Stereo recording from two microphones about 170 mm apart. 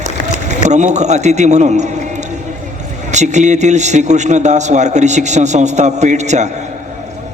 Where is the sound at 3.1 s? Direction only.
45° right (ahead or behind).